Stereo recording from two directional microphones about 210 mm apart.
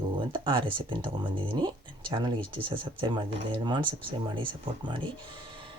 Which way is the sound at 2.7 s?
20° right (ahead or behind).